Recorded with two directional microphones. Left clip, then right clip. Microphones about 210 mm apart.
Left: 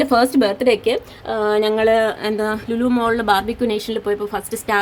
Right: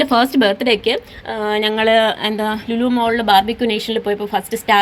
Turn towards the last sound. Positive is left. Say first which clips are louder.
# right 5 dB
turn(degrees=0)  # may be behind; listen again after turning